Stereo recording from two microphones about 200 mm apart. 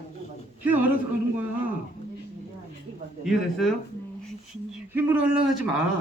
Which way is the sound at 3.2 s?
Centre (ahead or behind).